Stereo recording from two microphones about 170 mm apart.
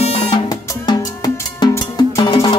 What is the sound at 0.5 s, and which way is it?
Music, 25° left (ahead or behind).